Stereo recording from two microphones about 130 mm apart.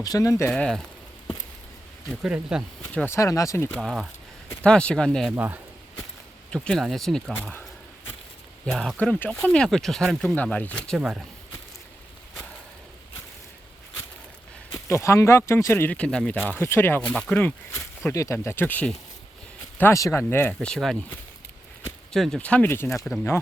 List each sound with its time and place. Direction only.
0.0 s speech: 25° left (ahead or behind)
0.5 s speech: 5° left (ahead or behind)
2.0 s speech: 5° right (ahead or behind)
3.1 s speech: 25° left (ahead or behind)
3.8 s speech: centre (ahead or behind)
5.3 s speech: 15° right (ahead or behind)
6.5 s speech: 5° left (ahead or behind)
8.6 s speech: 5° left (ahead or behind)
10.9 s speech: 5° right (ahead or behind)
14.8 s speech: 20° left (ahead or behind)
18.1 s speech: 25° left (ahead or behind); by 21.0 s centre (ahead or behind)
22.1 s speech: 5° left (ahead or behind)